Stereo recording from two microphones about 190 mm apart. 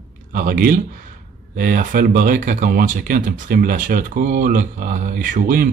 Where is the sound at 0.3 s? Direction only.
45° right (ahead or behind).